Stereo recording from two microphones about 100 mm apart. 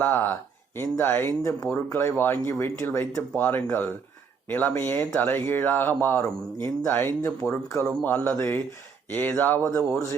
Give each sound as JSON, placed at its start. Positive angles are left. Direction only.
{"t": 0.0, "sound": "speech", "side_deg": 20}
{"t": 7.9, "sound": "mantra", "side_deg": 15}
{"t": 8.4, "sound": "speech", "side_deg": 25}